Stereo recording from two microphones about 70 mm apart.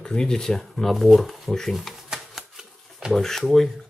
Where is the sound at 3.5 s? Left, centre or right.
Centre.